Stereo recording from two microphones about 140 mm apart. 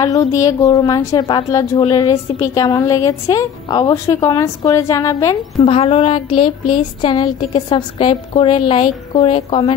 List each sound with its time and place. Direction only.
0.0 s a woman's voice: 25° left (ahead or behind)
5.6 s a woman's voice: 45° left (ahead or behind)